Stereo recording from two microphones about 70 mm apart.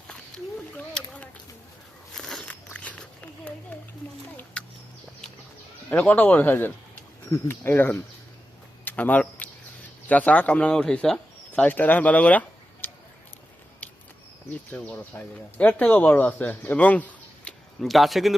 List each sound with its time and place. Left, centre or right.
0.9 s a sound: centre
2.1 s biting: centre
2.7 s a sound: centre
5.9 s speech: left
7.3 s speech: left; by 11.2 s centre
11.5 s speech: left
14.8 s speech: centre
17.7 s speech: centre